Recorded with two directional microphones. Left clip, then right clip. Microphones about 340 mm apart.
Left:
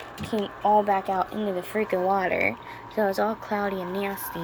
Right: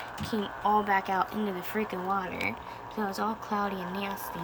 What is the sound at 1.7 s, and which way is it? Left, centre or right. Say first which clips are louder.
Speech: left 8 dB; right.